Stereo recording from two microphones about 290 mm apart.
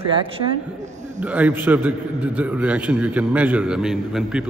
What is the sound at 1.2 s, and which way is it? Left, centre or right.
A man's voice, centre.